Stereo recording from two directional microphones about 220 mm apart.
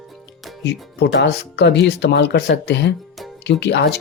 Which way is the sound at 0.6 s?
50° left (ahead or behind).